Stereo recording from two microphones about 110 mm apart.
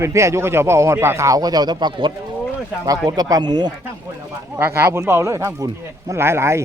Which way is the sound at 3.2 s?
35° right (ahead or behind).